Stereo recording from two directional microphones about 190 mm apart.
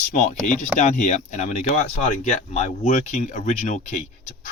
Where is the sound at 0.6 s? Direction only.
40° left (ahead or behind).